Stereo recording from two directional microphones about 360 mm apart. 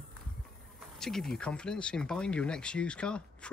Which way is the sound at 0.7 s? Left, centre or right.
Centre.